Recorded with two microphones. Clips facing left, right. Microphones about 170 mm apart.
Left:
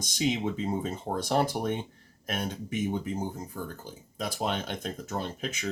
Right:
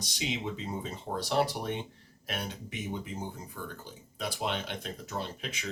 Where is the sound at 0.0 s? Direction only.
45° left (ahead or behind).